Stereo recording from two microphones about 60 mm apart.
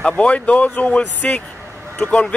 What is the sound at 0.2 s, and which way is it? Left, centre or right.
Speech, left.